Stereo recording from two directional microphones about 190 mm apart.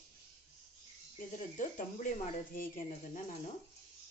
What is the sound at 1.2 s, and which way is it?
Speech, 40° left (ahead or behind).